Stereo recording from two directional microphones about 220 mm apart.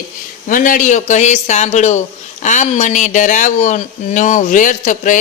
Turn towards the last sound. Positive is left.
turn(degrees=35)  # may be behind; listen again after turning